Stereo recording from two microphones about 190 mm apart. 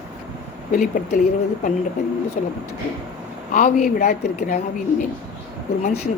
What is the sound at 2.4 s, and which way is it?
Speech, 40° left (ahead or behind).